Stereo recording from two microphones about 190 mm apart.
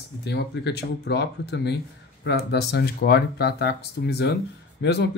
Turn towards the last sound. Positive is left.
turn(degrees=60)  # may be behind; listen again after turning